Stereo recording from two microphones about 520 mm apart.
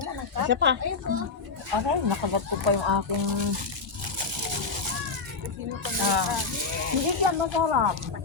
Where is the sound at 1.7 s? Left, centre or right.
Right.